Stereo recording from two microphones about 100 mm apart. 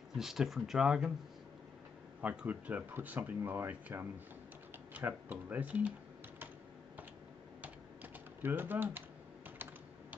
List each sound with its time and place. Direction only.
0.2 s speech: 5° right (ahead or behind)
2.2 s speech: 15° right (ahead or behind)
7.6 s typing: 20° right (ahead or behind)